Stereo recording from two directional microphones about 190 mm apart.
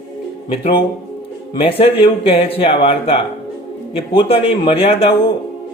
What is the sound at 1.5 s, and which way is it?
A man's voice, 30° left (ahead or behind).